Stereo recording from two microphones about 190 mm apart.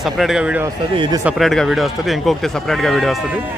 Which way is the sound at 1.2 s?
Centre (ahead or behind).